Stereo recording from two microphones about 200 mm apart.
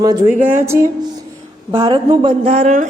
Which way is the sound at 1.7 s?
25° right (ahead or behind).